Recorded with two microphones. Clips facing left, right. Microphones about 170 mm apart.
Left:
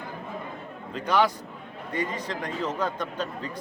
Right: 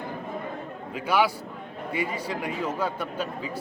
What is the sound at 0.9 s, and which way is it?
Speech, 10° right (ahead or behind).